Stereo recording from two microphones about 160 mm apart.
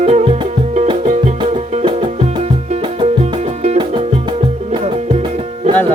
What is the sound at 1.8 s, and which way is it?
Music, 30° right (ahead or behind).